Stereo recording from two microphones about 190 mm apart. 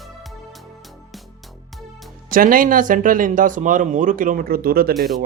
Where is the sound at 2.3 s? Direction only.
45° right (ahead or behind).